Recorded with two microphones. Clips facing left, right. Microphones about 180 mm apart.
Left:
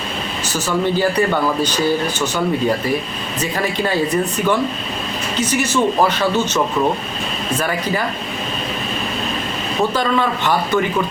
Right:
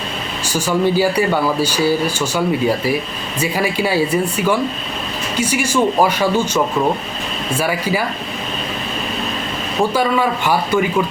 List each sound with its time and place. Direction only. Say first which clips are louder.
0.5 s speech: right 3 dB; 10° right (ahead or behind)
9.9 s speech: right 2 dB; 10° right (ahead or behind)